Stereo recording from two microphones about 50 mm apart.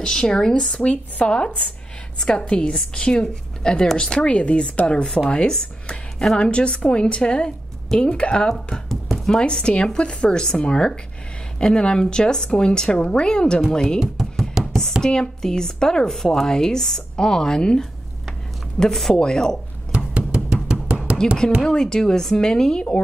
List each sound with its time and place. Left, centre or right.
0.0 s a woman's voice: centre
0.7 s a woman's voice: left
4.3 s a woman's voice: left
9.1 s a sound: centre
9.4 s a woman's voice: centre
14.0 s knock: centre
15.0 s a woman's voice: centre
19.9 s music: right
21.1 s a sound: right
21.6 s a woman's voice: centre